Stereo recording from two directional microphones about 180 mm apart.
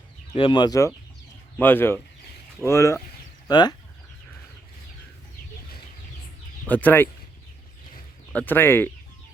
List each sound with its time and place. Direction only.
0.3 s speech: 30° left (ahead or behind)
6.7 s speech: 10° left (ahead or behind)
8.3 s speech: 10° left (ahead or behind)